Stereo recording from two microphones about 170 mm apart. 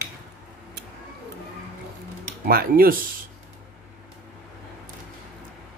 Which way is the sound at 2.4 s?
60° right (ahead or behind).